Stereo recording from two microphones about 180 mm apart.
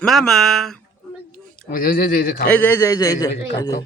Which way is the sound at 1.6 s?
55° left (ahead or behind).